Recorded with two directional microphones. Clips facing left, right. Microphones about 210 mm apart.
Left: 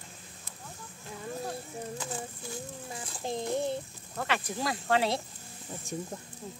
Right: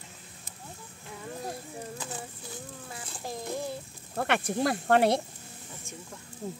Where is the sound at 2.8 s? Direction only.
25° left (ahead or behind).